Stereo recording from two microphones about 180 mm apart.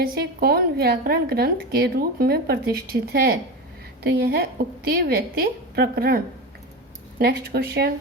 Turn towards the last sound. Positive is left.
turn(degrees=-60)  # may be behind; listen again after turning